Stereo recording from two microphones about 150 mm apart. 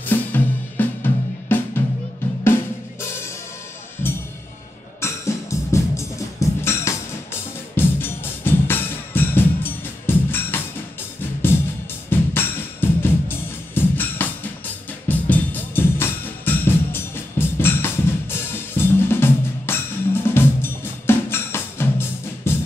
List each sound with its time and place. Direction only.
0.0 s drum kit: 10° left (ahead or behind)
3.0 s drum kit: 15° left (ahead or behind)
5.0 s music: 20° left (ahead or behind)
12.1 s music: 15° left (ahead or behind)